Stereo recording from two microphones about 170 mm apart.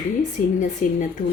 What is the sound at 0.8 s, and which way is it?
Speech, 45° left (ahead or behind).